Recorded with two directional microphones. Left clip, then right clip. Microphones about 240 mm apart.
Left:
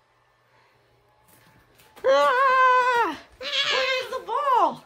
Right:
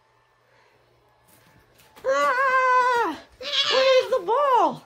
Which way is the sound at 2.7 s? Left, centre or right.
Centre.